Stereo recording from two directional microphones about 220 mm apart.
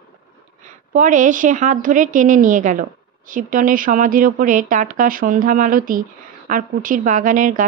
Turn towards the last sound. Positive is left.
turn(degrees=-35)  # may be behind; listen again after turning